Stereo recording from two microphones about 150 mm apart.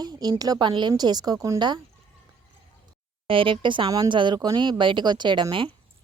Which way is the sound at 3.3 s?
35° right (ahead or behind).